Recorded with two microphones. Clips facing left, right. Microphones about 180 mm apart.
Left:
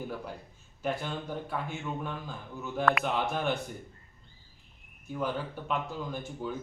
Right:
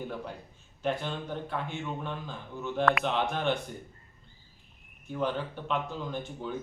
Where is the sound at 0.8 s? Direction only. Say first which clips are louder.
Right 1 dB; 10° left (ahead or behind).